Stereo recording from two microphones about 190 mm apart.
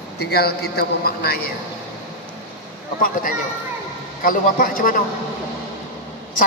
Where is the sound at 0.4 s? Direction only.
55° left (ahead or behind).